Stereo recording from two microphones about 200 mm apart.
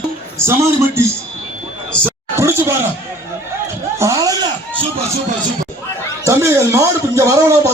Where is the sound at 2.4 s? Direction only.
15° right (ahead or behind).